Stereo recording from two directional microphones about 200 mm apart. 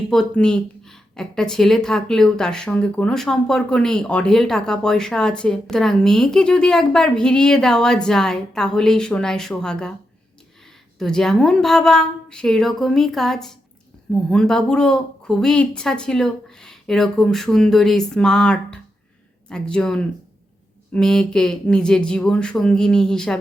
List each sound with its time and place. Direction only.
0.1 s speech: 5° left (ahead or behind)
10.9 s speech: 5° left (ahead or behind)